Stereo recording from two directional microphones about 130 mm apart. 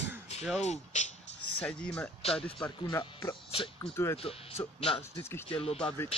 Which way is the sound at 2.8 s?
30° left (ahead or behind).